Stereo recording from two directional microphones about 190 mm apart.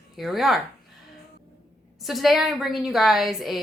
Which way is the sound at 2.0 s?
Centre (ahead or behind).